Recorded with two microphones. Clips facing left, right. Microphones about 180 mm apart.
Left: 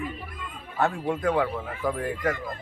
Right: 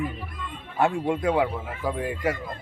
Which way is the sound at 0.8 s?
15° right (ahead or behind).